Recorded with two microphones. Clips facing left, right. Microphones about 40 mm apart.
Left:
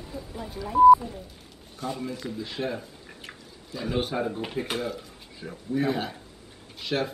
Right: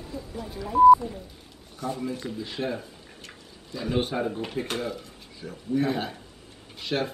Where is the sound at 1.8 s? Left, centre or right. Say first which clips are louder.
Right 1 dB; left.